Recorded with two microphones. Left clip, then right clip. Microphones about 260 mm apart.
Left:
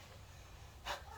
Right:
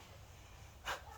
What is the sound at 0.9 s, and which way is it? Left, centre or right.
Breathing, centre.